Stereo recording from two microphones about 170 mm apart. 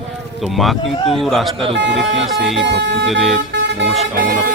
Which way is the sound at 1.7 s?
90° right.